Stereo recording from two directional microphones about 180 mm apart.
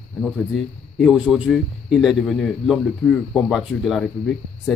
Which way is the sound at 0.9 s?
Centre (ahead or behind).